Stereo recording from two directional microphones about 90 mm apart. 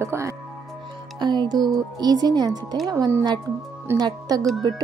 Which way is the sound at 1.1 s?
55° right (ahead or behind).